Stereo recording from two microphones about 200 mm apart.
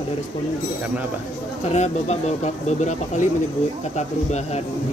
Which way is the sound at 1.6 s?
35° left (ahead or behind).